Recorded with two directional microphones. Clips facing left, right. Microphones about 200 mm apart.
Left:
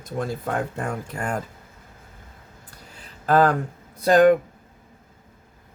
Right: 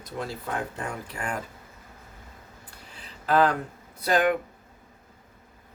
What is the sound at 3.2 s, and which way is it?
Speech, 45° left (ahead or behind).